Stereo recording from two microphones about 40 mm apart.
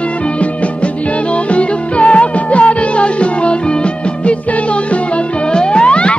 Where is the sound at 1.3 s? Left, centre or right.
Left.